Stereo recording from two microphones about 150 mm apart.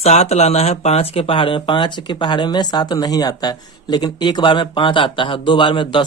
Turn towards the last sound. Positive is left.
turn(degrees=35)  # may be behind; listen again after turning